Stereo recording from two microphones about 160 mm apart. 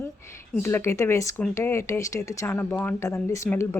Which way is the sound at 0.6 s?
15° left (ahead or behind).